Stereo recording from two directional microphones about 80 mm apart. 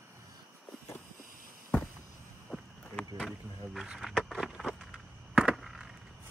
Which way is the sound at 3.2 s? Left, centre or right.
Centre.